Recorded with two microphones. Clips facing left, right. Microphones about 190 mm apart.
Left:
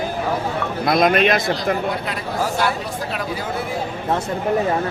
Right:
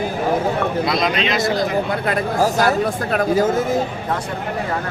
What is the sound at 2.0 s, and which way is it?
Speech, 45° right (ahead or behind).